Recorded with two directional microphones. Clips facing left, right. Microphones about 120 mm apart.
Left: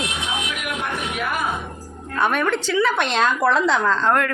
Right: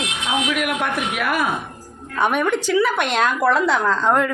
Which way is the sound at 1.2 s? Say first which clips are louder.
Right 4 dB; 75° right (ahead or behind).